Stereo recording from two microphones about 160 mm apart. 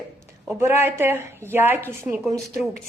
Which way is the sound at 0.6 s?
15° right (ahead or behind).